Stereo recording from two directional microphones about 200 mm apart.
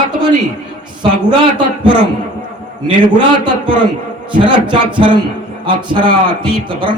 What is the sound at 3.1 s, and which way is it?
A man's voice, 25° right (ahead or behind).